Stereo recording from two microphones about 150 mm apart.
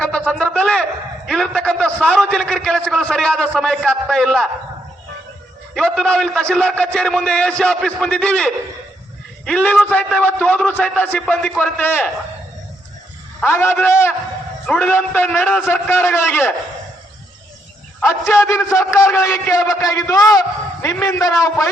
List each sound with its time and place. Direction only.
0.0 s a sound: 5° left (ahead or behind)
1.3 s a man's voice: 5° left (ahead or behind)
5.7 s a man's voice: centre (ahead or behind)
13.4 s a man's voice: 15° left (ahead or behind)
18.0 s a man's voice: 20° left (ahead or behind)